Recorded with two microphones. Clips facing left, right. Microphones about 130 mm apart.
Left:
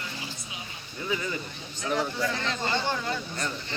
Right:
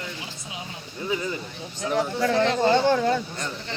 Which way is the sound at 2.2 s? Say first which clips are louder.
Right 9 dB; 65° right (ahead or behind).